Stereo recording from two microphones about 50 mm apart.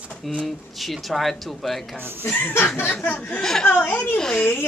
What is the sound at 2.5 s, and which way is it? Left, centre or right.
Speech, left.